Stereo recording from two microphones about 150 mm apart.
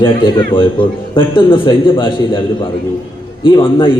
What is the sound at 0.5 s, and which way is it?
A man's voice, 35° left (ahead or behind).